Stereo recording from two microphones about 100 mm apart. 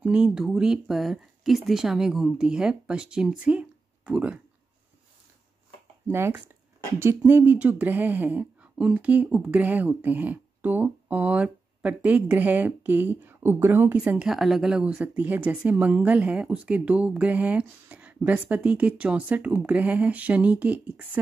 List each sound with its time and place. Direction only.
0.0 s speech: 10° right (ahead or behind)
6.0 s speech: 25° right (ahead or behind)
14.3 s speech: centre (ahead or behind)